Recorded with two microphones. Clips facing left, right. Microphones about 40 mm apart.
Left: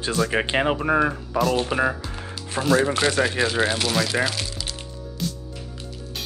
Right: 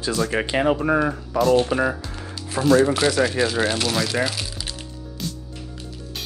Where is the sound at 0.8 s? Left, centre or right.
Centre.